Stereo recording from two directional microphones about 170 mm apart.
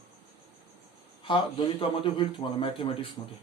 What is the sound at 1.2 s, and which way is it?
A man's voice, 30° left (ahead or behind).